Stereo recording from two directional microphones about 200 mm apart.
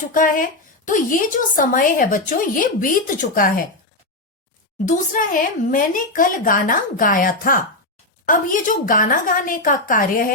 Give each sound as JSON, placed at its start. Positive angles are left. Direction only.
{"t": 0.1, "sound": "a woman's voice", "side_deg": 40}
{"t": 4.9, "sound": "a woman's voice", "side_deg": 40}